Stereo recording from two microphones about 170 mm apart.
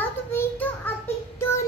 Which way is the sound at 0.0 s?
10° left (ahead or behind).